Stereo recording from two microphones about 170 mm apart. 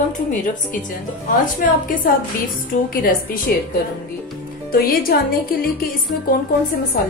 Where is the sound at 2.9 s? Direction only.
55° left (ahead or behind).